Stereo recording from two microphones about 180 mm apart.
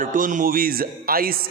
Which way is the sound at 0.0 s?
50° right (ahead or behind).